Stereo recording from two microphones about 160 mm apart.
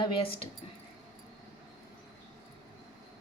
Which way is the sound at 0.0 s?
35° left (ahead or behind).